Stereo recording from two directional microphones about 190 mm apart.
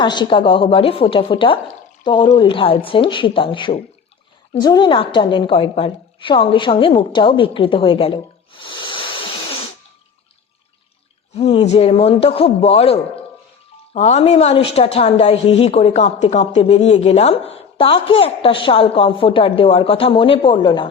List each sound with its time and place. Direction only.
0.0 s speech: 25° left (ahead or behind)
11.3 s a man's voice: 35° left (ahead or behind)